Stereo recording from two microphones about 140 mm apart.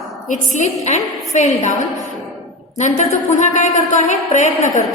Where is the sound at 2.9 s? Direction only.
60° left (ahead or behind).